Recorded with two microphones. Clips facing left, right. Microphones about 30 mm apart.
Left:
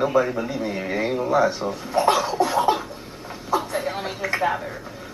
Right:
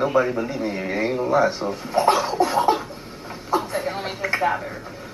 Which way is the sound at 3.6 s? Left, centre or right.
Centre.